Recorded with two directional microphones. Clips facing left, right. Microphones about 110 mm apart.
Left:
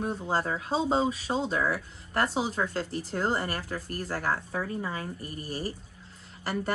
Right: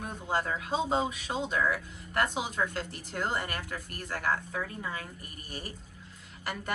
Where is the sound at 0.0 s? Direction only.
35° left (ahead or behind).